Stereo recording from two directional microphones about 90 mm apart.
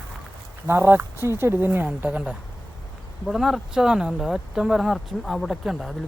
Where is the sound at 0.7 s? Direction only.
25° right (ahead or behind).